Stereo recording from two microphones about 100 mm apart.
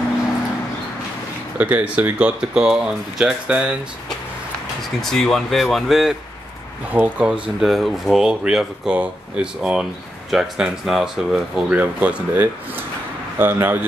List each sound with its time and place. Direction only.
1.6 s speech: 15° right (ahead or behind)
5.0 s speech: 5° left (ahead or behind)
6.9 s speech: 15° right (ahead or behind)
11.8 s speech: 15° right (ahead or behind)